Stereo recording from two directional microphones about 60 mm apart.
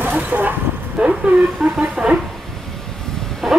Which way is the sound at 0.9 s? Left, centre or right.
Right.